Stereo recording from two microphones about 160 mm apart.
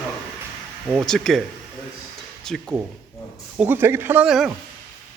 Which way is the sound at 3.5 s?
10° right (ahead or behind).